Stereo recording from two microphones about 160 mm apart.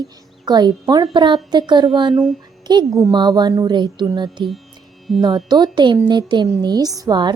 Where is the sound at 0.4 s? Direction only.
25° right (ahead or behind).